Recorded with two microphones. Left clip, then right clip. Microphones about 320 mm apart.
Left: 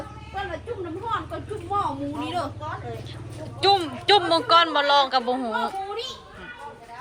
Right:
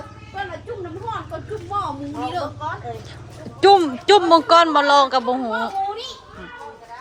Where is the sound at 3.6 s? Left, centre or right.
Right.